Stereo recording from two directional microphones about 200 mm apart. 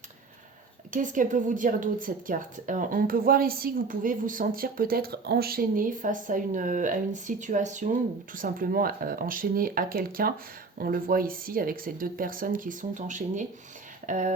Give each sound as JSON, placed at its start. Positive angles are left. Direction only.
{"t": 0.9, "sound": "a woman's voice", "side_deg": -40}